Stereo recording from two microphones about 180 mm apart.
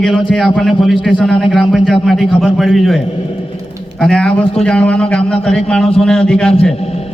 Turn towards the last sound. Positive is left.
turn(degrees=5)  # may be behind; listen again after turning